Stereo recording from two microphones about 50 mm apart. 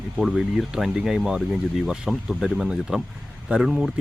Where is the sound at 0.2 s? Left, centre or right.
Centre.